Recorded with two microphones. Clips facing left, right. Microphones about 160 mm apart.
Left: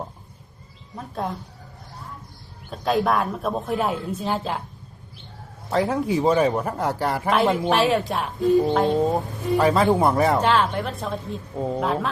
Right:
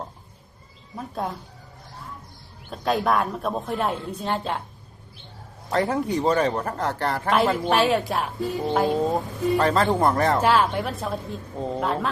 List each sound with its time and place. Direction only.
0.9 s speech: centre (ahead or behind)
2.6 s speech: centre (ahead or behind)
5.7 s speech: centre (ahead or behind)
9.6 s speech: 10° left (ahead or behind)
10.4 s speech: 5° right (ahead or behind)